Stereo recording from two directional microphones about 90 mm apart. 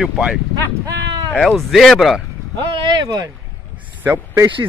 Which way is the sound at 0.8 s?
40° right (ahead or behind).